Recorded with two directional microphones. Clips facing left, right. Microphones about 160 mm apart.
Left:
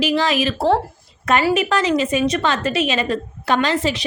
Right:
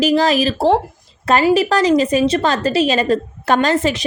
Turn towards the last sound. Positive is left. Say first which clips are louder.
# right 3 dB
turn(degrees=-45)  # may be behind; listen again after turning